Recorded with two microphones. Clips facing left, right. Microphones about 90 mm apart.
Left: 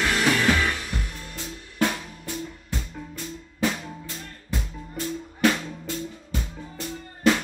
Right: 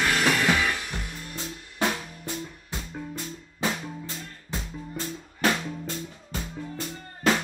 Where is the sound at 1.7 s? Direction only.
25° right (ahead or behind).